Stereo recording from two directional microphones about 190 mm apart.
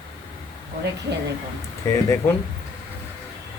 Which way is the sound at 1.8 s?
15° left (ahead or behind).